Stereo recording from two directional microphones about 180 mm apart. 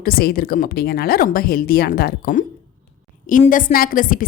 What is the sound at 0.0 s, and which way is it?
A woman's voice, 55° left (ahead or behind).